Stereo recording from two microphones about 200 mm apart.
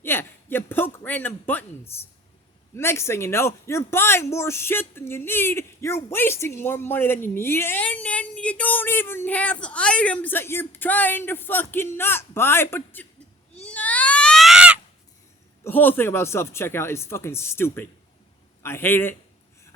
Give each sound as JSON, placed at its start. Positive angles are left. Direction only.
{"t": 0.0, "sound": "a sound", "side_deg": 10}
{"t": 1.9, "sound": "speech", "side_deg": 10}
{"t": 13.6, "sound": "baby cry", "side_deg": 5}
{"t": 15.6, "sound": "speech", "side_deg": 10}